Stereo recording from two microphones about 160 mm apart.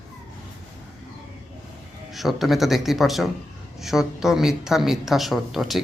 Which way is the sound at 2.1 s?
Centre (ahead or behind).